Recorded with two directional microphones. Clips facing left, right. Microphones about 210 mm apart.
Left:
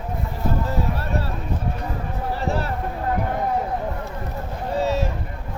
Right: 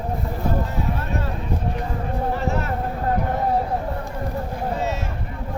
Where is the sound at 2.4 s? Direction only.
35° left (ahead or behind).